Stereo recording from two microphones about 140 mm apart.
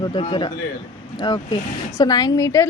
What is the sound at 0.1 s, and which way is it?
A man's voice, 35° left (ahead or behind).